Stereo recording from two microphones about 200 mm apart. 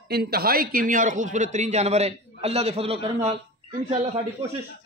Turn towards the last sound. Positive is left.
turn(degrees=-30)  # may be behind; listen again after turning